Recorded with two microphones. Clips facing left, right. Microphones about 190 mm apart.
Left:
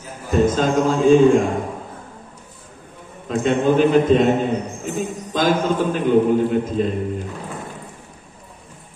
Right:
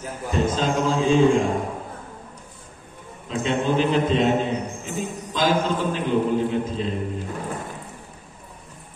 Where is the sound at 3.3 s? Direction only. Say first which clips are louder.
Left 5 dB; 50° left (ahead or behind).